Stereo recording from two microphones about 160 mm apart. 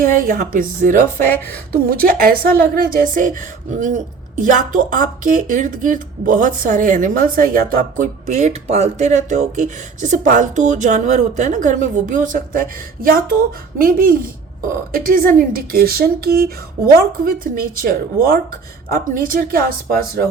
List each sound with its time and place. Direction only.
0.0 s a woman's voice: 60° right (ahead or behind)